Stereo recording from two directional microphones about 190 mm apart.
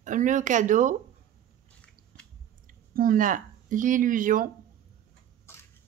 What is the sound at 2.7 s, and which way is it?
Speech, 45° right (ahead or behind).